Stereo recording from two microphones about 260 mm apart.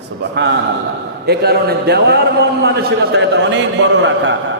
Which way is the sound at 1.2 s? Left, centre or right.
Right.